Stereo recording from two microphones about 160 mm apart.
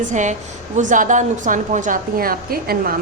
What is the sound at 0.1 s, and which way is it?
A woman's voice, 50° right (ahead or behind).